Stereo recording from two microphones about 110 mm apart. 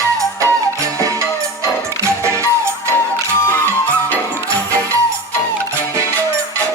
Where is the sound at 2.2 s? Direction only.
25° right (ahead or behind).